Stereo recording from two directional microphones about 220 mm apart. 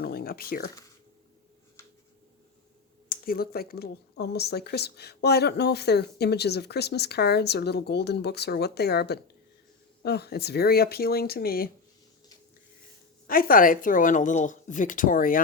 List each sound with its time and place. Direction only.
0.0 s a sound: 45° left (ahead or behind)
3.1 s speech: 40° left (ahead or behind)
13.2 s speech: 40° left (ahead or behind)